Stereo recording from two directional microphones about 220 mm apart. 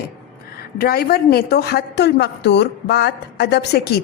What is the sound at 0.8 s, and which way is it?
A woman's voice, 45° left (ahead or behind).